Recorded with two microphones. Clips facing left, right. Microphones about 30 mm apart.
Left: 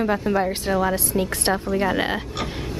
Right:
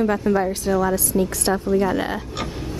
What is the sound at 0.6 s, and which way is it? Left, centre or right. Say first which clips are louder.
A woman's voice: right 1 dB; left.